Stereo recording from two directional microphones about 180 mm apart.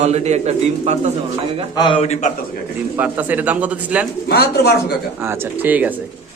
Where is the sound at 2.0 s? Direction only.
40° left (ahead or behind).